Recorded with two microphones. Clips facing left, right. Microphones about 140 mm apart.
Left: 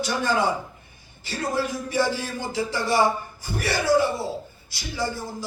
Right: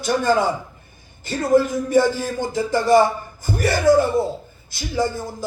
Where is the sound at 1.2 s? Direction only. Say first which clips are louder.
Right 9 dB; 50° right (ahead or behind).